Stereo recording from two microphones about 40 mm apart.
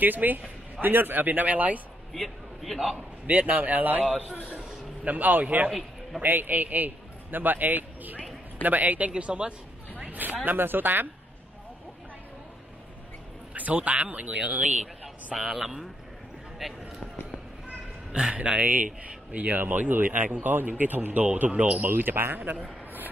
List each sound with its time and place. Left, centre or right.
0.0 s speech: right
2.1 s a man's voice: centre
3.3 s speech: right
5.0 s speech: right
5.7 s a man's voice: centre
6.2 s a man's voice: right
9.1 s speech: right
9.9 s speech: right
13.6 s speech: right
15.3 s speech: centre
17.6 s a sound: centre
18.3 s speech: right
19.6 s speech: right
21.5 s speech: right